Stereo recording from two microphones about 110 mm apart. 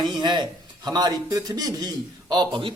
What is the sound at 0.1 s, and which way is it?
A man's voice, 45° right (ahead or behind).